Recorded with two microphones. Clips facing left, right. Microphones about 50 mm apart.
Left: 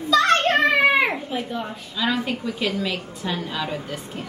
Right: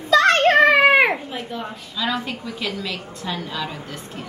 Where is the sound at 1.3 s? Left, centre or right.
Centre.